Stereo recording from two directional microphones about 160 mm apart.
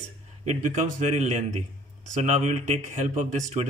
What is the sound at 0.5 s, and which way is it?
Speech, 45° right (ahead or behind).